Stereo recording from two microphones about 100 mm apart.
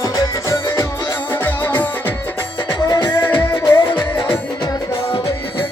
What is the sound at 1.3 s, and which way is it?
Music, 20° left (ahead or behind).